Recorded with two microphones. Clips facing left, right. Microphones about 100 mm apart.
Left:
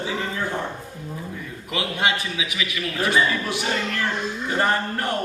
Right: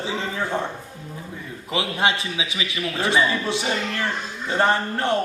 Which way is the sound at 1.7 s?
25° right (ahead or behind).